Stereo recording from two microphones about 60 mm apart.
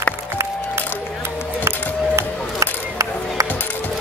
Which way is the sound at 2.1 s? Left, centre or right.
Right.